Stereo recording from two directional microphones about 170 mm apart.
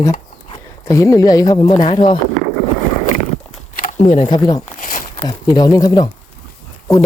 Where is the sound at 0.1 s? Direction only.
35° left (ahead or behind).